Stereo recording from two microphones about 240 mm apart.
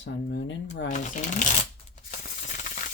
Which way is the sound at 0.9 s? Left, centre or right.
Left.